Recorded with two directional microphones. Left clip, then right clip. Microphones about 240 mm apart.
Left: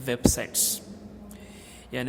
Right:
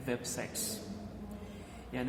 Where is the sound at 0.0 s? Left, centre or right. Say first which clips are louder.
Left 11 dB; left.